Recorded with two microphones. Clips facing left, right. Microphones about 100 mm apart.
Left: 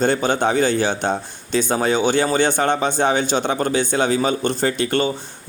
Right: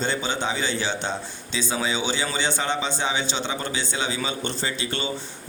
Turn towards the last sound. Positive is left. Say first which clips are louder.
# left 9 dB
turn(degrees=50)  # may be behind; listen again after turning